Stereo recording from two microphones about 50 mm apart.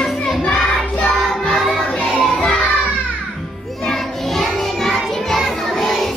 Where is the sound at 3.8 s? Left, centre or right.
Centre.